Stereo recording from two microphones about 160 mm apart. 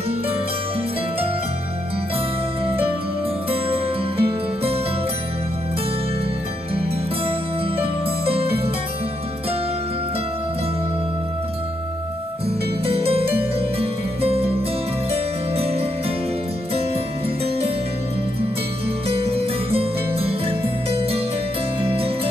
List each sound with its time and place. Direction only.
3.4 s music: 35° right (ahead or behind)
6.7 s music: 35° right (ahead or behind)
12.4 s music: 40° right (ahead or behind)
19.0 s music: 35° right (ahead or behind)
21.8 s music: 35° right (ahead or behind)